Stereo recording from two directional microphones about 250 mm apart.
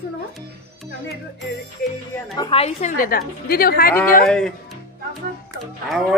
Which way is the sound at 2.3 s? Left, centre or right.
Left.